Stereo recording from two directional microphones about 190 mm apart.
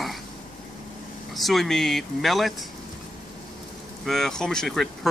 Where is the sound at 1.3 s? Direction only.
Centre (ahead or behind).